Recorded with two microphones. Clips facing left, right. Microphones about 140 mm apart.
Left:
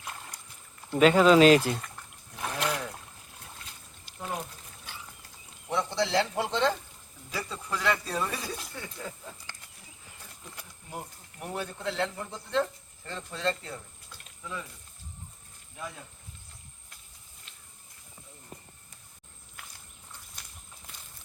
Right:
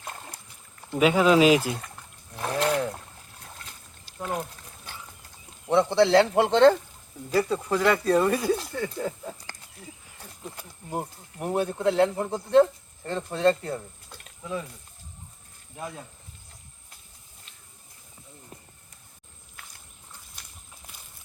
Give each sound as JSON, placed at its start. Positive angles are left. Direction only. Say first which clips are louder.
{"t": 0.9, "sound": "speech", "louder": "even", "side_deg": -5}
{"t": 2.3, "sound": "boat", "louder": "right 6 dB", "side_deg": -40}
{"t": 5.6, "sound": "speech", "louder": "right 9 dB", "side_deg": -65}
{"t": 10.4, "sound": "a sound", "louder": "right 9 dB", "side_deg": -40}
{"t": 11.8, "sound": "speech", "louder": "right 10 dB", "side_deg": -50}